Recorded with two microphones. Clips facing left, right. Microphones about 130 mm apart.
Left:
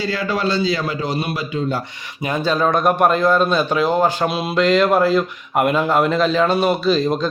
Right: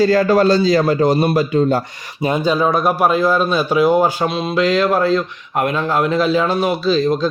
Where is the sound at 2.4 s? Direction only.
10° right (ahead or behind).